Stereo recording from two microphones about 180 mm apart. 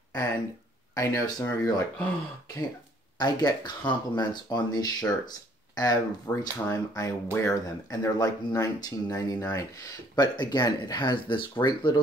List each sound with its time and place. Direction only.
0.9 s speech: 20° left (ahead or behind)
3.2 s speech: 25° left (ahead or behind)